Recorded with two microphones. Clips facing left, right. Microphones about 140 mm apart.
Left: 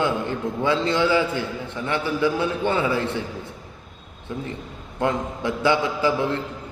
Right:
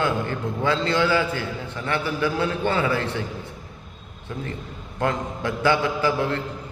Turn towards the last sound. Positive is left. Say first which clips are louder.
# left 1 dB
turn(degrees=20)  # may be behind; listen again after turning